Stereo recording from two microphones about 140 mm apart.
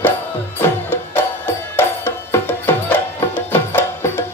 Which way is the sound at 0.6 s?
15° left (ahead or behind).